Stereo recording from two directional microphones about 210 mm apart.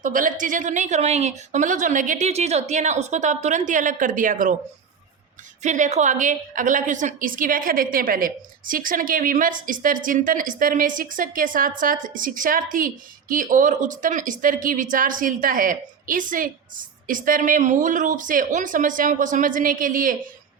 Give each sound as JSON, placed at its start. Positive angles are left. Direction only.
{"t": 0.0, "sound": "a woman's voice", "side_deg": -40}
{"t": 5.6, "sound": "a woman's voice", "side_deg": -35}